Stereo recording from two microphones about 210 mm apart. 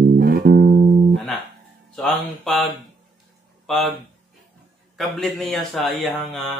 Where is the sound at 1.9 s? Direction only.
5° left (ahead or behind).